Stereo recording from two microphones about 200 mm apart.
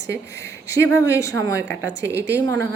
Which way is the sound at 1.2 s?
15° left (ahead or behind).